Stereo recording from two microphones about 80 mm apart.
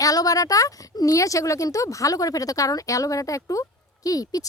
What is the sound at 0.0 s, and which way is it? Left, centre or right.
Speech, left.